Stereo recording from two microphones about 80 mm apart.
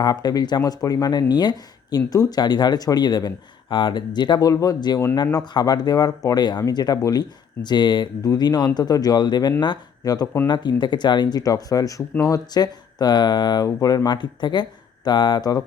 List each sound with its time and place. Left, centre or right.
0.0 s speech: left
2.0 s speech: left
2.4 s speech: left
4.4 s speech: left
10.0 s speech: left
10.4 s speech: left